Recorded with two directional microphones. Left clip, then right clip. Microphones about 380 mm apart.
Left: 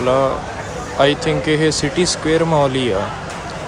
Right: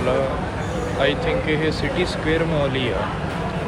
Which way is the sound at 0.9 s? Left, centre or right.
Centre.